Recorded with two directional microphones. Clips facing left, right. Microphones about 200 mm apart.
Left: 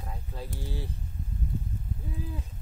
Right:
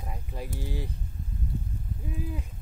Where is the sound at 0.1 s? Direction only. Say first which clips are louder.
Right 3 dB; 15° right (ahead or behind).